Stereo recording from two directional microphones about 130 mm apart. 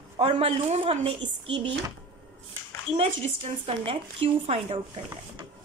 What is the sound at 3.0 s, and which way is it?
A woman's voice, 50° right (ahead or behind).